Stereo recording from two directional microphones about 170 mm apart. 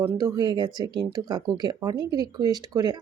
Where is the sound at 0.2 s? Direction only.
25° right (ahead or behind).